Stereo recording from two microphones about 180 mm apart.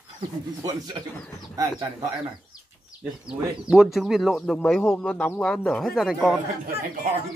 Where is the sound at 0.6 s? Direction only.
20° right (ahead or behind).